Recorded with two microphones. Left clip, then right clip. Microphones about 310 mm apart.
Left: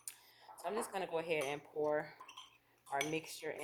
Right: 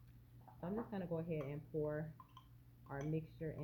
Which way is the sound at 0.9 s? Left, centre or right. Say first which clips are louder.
Left 7 dB; left.